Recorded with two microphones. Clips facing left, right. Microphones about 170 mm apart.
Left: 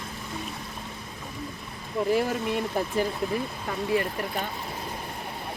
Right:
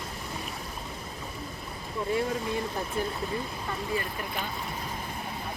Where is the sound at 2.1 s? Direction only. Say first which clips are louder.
Left 3 dB; 80° left.